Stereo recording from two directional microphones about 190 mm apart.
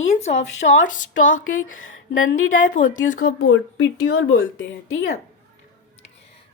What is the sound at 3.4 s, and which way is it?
A woman's voice, 90° left.